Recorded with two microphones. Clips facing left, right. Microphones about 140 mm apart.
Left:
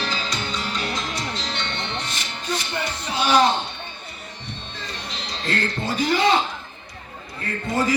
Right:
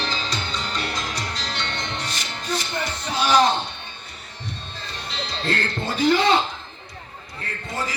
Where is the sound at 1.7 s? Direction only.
40° right (ahead or behind).